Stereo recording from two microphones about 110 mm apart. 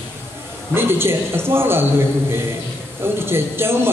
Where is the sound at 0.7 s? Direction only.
20° right (ahead or behind).